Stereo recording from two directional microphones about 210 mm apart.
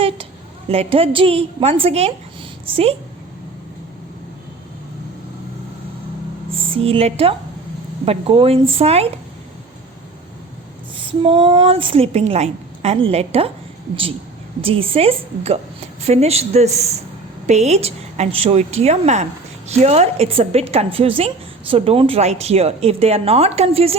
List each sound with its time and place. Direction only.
0.7 s a woman's voice: 25° right (ahead or behind)
6.5 s a woman's voice: 25° right (ahead or behind)
11.0 s a woman's voice: 25° right (ahead or behind)
14.6 s a woman's voice: 25° right (ahead or behind)